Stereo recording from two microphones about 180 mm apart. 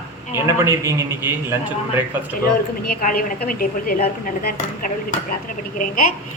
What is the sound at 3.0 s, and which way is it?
Speech, 50° left (ahead or behind).